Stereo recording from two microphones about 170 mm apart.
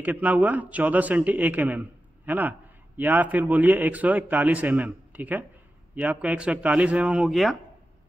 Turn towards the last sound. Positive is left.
turn(degrees=0)  # may be behind; listen again after turning